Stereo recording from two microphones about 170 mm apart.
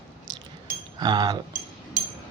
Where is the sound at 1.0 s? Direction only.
25° right (ahead or behind).